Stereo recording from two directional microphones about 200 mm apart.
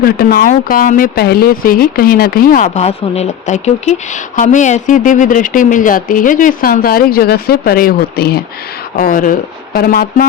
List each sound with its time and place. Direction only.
0.0 s speech: 50° left (ahead or behind)